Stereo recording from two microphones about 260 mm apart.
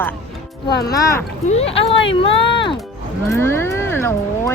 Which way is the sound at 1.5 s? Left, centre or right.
Left.